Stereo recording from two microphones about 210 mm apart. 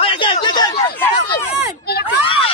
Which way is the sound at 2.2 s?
25° left (ahead or behind).